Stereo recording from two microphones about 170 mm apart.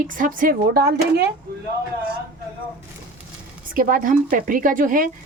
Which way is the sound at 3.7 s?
50° right (ahead or behind).